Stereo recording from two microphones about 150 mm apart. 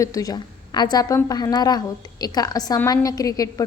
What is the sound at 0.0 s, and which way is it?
A woman's voice, 25° left (ahead or behind).